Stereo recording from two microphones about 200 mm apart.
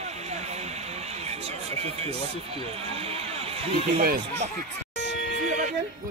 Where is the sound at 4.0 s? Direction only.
45° right (ahead or behind).